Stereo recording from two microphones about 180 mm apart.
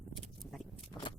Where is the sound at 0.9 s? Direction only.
25° left (ahead or behind).